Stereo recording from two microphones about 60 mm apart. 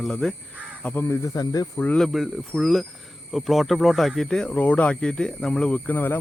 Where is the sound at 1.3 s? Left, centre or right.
Left.